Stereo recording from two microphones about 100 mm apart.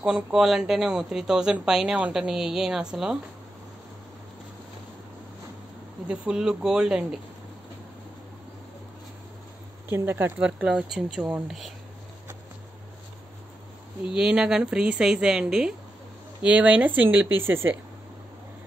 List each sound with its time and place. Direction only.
0.0 s speech: 5° right (ahead or behind)
6.0 s speech: 10° right (ahead or behind)
9.8 s speech: 25° right (ahead or behind)
10.4 s speech: 10° right (ahead or behind)
14.1 s speech: 5° right (ahead or behind)